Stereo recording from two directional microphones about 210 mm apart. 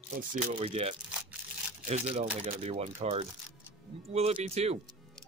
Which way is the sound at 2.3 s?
30° right (ahead or behind).